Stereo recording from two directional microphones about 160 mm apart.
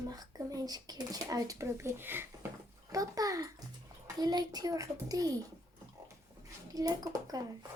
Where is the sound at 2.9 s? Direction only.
20° right (ahead or behind).